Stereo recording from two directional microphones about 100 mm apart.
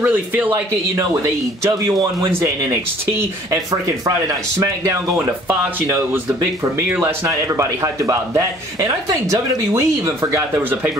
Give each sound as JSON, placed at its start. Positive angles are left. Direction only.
{"t": 0.0, "sound": "speech", "side_deg": -15}
{"t": 0.9, "sound": "a man's voice", "side_deg": -30}
{"t": 4.0, "sound": "speech", "side_deg": -30}